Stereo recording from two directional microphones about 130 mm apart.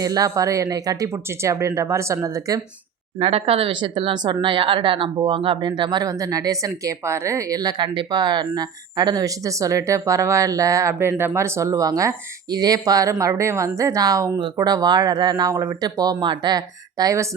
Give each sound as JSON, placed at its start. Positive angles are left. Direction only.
{"t": 0.0, "sound": "speech", "side_deg": -30}
{"t": 3.2, "sound": "speech", "side_deg": -50}